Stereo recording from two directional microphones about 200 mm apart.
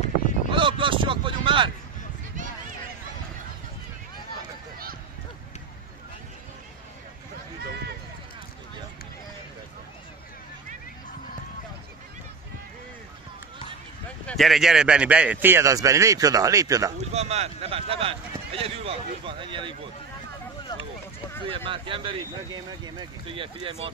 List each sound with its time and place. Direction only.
0.5 s a sound: 25° right (ahead or behind)
14.2 s a man's voice: centre (ahead or behind); by 16.9 s 15° right (ahead or behind)
17.1 s speech: 30° right (ahead or behind)
21.5 s speech: 25° right (ahead or behind)